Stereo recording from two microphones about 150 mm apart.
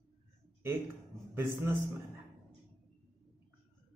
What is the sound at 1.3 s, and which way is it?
Speech, 15° right (ahead or behind).